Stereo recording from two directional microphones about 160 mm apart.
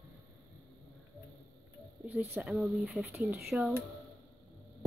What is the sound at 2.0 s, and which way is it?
Speech, 10° right (ahead or behind).